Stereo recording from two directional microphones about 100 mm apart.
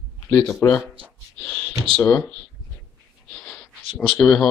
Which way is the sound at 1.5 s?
10° left (ahead or behind).